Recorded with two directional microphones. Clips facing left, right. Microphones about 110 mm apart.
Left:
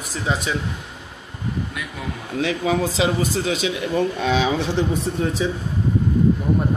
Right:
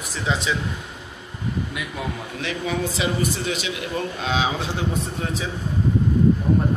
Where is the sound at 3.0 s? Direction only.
90° left.